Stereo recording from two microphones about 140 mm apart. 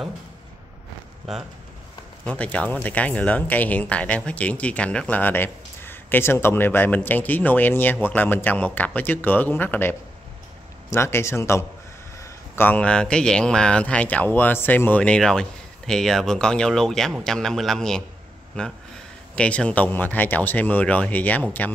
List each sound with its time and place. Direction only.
2.2 s a man's voice: 10° left (ahead or behind)